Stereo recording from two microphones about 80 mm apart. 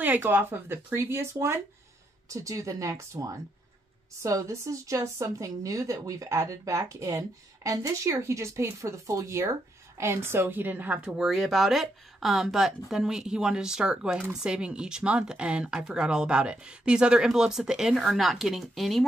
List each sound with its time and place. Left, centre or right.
0.0 s speech: right
2.2 s a woman's voice: right
11.1 s speech: centre